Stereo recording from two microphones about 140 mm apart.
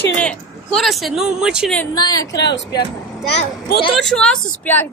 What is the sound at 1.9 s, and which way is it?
Speech, 30° left (ahead or behind).